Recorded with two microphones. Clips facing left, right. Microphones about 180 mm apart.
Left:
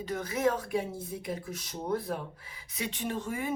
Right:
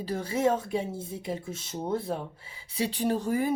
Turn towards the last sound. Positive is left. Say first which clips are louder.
# right 7 dB
turn(degrees=-35)  # may be behind; listen again after turning